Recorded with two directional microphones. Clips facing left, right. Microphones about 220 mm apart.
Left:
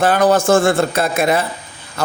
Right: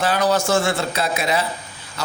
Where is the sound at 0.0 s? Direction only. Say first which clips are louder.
Left 6 dB; 50° left (ahead or behind).